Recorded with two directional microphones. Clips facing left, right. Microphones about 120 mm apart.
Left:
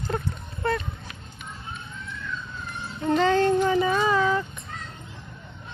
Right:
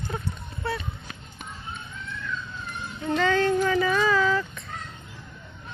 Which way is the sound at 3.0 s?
35° left (ahead or behind).